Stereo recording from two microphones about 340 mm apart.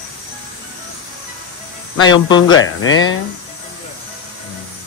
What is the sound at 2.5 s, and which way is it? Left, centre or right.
Speech, left.